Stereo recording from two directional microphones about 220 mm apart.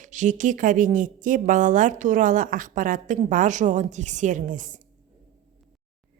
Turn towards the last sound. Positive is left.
turn(degrees=-35)  # may be behind; listen again after turning